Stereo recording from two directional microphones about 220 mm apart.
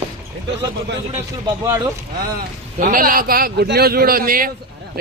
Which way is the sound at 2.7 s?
40° right (ahead or behind).